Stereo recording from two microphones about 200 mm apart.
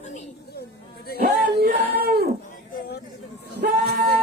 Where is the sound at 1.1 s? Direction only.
50° right (ahead or behind).